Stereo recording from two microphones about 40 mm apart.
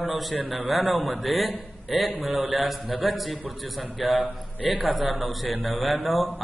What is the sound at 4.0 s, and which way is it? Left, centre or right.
Speech, right.